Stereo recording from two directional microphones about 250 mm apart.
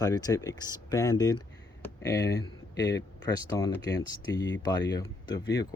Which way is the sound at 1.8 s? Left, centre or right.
Centre.